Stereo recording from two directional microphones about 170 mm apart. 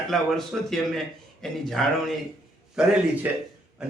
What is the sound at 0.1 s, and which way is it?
A man's voice, centre (ahead or behind).